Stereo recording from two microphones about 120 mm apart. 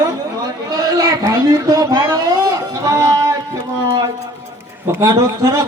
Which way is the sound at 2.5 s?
25° right (ahead or behind).